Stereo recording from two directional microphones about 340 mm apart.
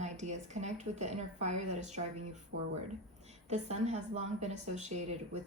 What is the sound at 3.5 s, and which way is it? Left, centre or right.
Speech, centre.